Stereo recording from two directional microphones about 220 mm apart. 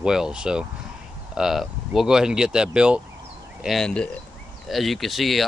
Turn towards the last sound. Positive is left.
turn(degrees=0)  # may be behind; listen again after turning